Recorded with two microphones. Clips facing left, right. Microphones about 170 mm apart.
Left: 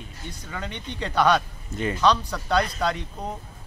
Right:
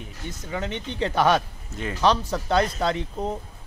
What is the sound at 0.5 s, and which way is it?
Speech, 20° right (ahead or behind).